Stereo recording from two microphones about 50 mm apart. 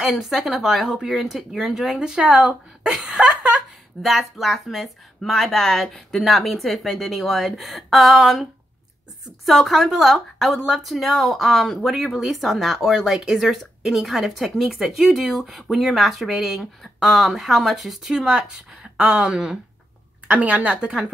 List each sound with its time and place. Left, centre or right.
0.0 s speech: centre
3.1 s a sound: right
4.0 s speech: centre
9.5 s speech: centre
20.2 s speech: right